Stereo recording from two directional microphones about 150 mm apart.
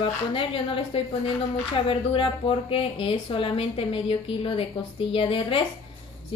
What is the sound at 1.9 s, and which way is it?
Speech, 35° left (ahead or behind).